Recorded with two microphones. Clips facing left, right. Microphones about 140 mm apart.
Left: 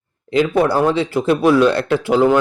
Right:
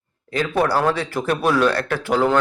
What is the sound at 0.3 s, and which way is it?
Speech, 20° left (ahead or behind).